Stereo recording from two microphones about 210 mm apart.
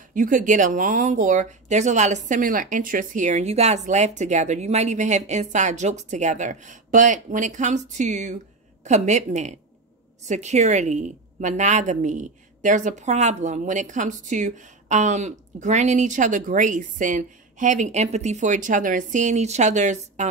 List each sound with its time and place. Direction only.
0.1 s a woman's voice: 40° right (ahead or behind)